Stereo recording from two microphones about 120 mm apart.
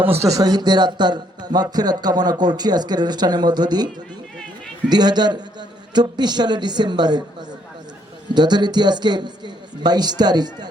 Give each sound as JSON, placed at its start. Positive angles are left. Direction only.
{"t": 0.2, "sound": "a man's voice", "side_deg": -30}
{"t": 4.9, "sound": "a man's voice", "side_deg": -35}
{"t": 8.3, "sound": "a man's voice", "side_deg": -35}